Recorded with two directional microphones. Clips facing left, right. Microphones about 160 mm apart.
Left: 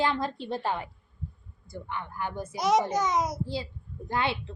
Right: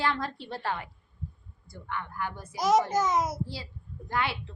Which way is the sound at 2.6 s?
Centre (ahead or behind).